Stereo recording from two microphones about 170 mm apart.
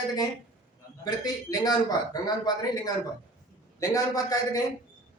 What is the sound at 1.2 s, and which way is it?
Speech, 20° left (ahead or behind).